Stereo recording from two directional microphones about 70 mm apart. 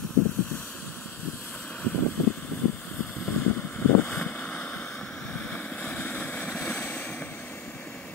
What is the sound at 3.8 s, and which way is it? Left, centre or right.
Vehicle, left.